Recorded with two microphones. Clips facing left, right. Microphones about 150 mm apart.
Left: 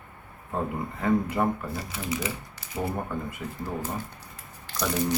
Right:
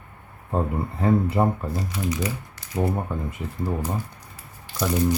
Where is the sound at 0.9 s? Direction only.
30° right (ahead or behind).